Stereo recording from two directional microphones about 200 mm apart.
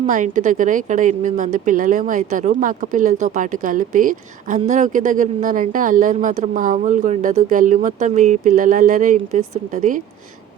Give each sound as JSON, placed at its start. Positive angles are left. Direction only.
{"t": 0.0, "sound": "speech", "side_deg": -40}